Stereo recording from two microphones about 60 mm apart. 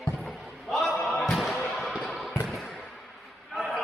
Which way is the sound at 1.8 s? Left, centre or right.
Centre.